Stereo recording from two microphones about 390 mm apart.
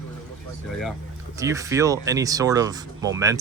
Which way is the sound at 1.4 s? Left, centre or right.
Centre.